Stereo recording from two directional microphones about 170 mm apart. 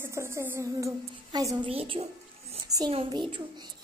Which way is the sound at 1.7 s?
35° right (ahead or behind).